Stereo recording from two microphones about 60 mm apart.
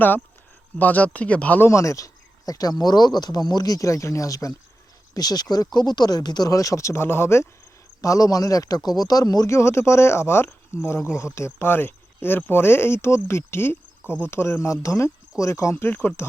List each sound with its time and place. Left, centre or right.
0.8 s speech: left
1.6 s speech: left
2.5 s a man's voice: left
5.1 s a man's voice: left
8.0 s a man's voice: left
9.5 s speech: left
15.7 s speech: left